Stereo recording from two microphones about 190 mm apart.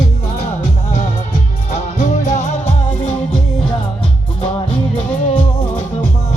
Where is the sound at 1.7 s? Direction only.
40° left (ahead or behind).